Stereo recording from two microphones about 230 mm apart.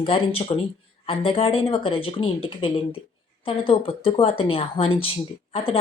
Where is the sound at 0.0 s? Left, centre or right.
Left.